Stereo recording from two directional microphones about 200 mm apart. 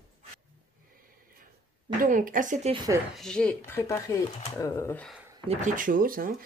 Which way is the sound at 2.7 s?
20° right (ahead or behind).